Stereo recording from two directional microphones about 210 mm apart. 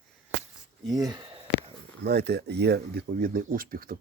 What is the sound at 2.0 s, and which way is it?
Speech, 50° right (ahead or behind).